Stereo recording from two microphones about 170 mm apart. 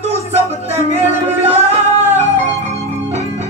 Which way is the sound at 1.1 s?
15° right (ahead or behind).